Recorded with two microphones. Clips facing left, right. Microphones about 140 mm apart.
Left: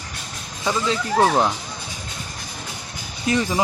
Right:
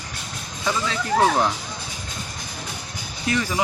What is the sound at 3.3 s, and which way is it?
Speech, 25° left (ahead or behind).